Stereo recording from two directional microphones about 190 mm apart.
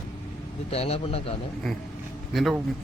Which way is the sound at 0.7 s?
30° left (ahead or behind).